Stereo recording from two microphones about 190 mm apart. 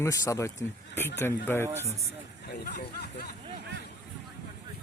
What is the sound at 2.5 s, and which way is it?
Speech, 60° left (ahead or behind).